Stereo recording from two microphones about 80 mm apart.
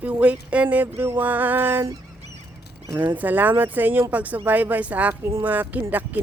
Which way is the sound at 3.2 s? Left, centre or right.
Right.